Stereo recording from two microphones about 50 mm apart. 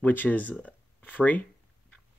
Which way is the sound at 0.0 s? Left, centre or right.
Left.